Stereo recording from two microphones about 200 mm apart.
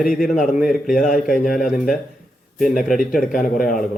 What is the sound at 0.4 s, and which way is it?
Speech, 45° left (ahead or behind).